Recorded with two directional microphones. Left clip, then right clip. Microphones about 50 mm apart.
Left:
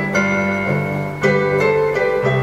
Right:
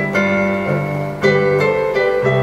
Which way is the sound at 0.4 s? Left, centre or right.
Centre.